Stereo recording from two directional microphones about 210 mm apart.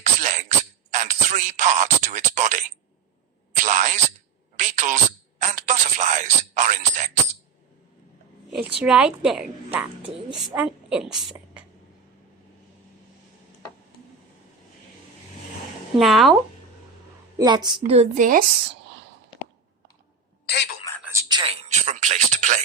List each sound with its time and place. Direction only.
0.0 s throat clearing: 35° right (ahead or behind)
0.9 s a sound: 35° right (ahead or behind)
8.8 s a woman's voice: 5° right (ahead or behind)
16.0 s a woman's voice: centre (ahead or behind)
17.3 s a woman's voice: 20° right (ahead or behind); by 18.8 s 40° right (ahead or behind)
21.0 s a sound: 15° right (ahead or behind); by 22.6 s 35° right (ahead or behind)